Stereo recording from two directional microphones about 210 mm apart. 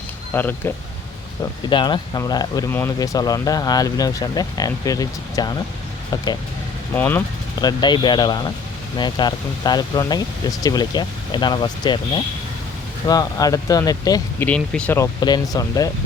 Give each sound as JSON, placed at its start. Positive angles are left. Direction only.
{"t": 0.3, "sound": "speech", "side_deg": 10}
{"t": 1.7, "sound": "speech", "side_deg": 20}
{"t": 6.9, "sound": "speech", "side_deg": 10}
{"t": 7.6, "sound": "speech", "side_deg": 20}